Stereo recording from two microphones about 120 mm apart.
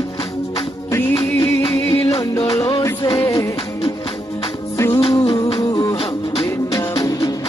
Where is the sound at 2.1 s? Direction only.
30° left (ahead or behind).